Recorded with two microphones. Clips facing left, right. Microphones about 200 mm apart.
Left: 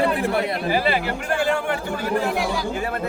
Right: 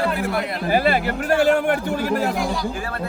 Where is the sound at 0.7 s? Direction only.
45° right (ahead or behind).